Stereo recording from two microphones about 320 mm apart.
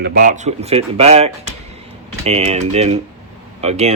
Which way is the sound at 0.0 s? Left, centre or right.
Right.